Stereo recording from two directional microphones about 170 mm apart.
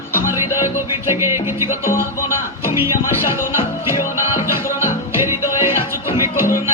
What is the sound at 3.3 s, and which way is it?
Music, 15° right (ahead or behind).